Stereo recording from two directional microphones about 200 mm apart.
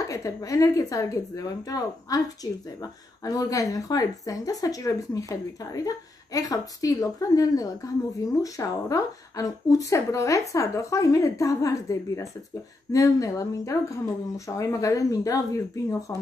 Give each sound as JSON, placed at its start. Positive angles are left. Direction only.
{"t": 0.1, "sound": "a woman's voice", "side_deg": 15}